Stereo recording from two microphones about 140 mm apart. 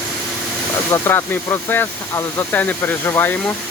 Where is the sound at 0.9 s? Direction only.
20° left (ahead or behind).